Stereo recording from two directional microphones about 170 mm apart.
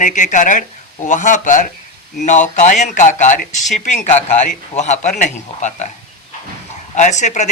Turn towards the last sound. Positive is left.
turn(degrees=45)  # may be behind; listen again after turning